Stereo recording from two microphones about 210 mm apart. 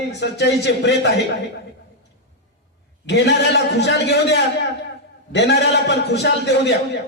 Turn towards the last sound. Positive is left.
turn(degrees=55)  # may be behind; listen again after turning